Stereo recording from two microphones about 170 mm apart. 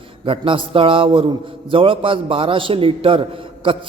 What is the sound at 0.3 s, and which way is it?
A man's voice, 30° right (ahead or behind).